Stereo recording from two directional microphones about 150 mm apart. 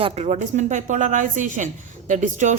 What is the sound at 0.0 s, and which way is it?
A woman's voice, 45° right (ahead or behind).